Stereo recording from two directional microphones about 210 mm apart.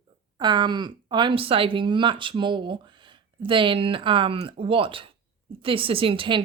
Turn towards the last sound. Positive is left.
turn(degrees=-25)  # may be behind; listen again after turning